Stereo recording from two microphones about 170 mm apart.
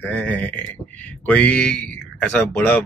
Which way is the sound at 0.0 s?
10° left (ahead or behind).